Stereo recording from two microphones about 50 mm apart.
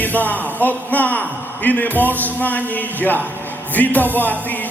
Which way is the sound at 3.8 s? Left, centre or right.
Left.